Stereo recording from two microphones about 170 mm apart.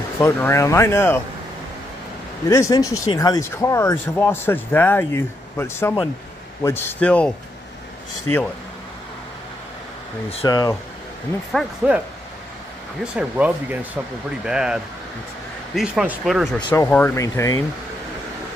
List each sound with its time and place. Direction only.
0.2 s speech: 15° left (ahead or behind)
2.5 s speech: 20° left (ahead or behind)
10.4 s speech: 20° left (ahead or behind)
11.5 s speech: 5° right (ahead or behind)
13.0 s speech: 5° right (ahead or behind)
16.6 s speech: 15° left (ahead or behind)